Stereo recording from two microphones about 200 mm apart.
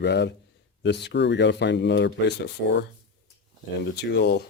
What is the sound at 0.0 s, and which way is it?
Speech, 60° left (ahead or behind).